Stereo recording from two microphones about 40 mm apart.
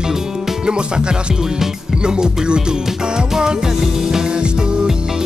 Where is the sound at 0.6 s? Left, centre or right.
Right.